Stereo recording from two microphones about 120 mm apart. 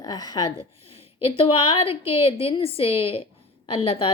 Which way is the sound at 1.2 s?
50° left (ahead or behind).